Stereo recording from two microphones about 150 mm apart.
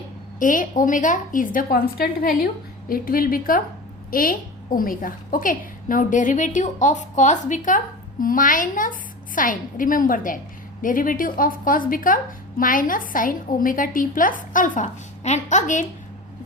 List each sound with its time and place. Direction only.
0.3 s a woman's voice: 60° left (ahead or behind); by 2.5 s 90° left
2.9 s a woman's voice: 75° left (ahead or behind); by 15.9 s 55° left (ahead or behind)